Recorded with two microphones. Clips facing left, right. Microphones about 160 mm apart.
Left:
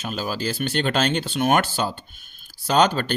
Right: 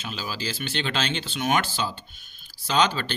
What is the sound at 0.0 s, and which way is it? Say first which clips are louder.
Speech: left 6 dB; 50° left (ahead or behind).